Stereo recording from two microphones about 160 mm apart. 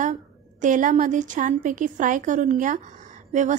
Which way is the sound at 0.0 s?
50° right (ahead or behind).